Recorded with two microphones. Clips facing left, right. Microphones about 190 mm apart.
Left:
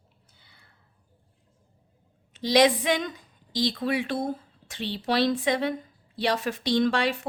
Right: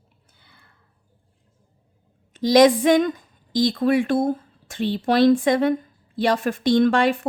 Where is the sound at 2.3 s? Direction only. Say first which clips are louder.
Right 6 dB; 45° right (ahead or behind).